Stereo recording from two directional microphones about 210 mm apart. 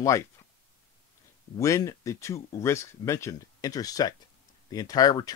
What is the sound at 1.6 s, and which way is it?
Speech, 15° left (ahead or behind).